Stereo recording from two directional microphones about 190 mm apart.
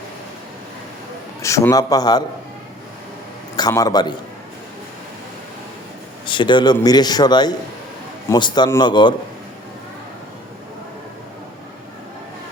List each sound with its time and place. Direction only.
1.4 s a man's voice: 15° left (ahead or behind)
3.6 s a man's voice: 20° left (ahead or behind)
6.2 s a man's voice: 25° left (ahead or behind)